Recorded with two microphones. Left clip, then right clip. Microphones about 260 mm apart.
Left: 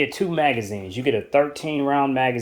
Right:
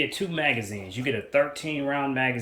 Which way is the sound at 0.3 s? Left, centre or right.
Centre.